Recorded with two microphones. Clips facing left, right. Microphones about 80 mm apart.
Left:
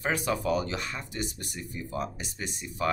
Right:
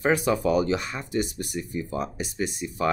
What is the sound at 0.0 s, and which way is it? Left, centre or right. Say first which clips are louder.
Speech: right 6 dB; centre.